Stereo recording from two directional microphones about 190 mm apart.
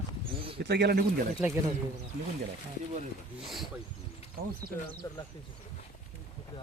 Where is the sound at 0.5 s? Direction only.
60° right (ahead or behind).